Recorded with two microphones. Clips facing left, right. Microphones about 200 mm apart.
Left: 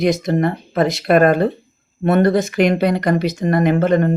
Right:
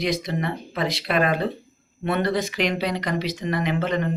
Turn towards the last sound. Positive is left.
turn(degrees=50)  # may be behind; listen again after turning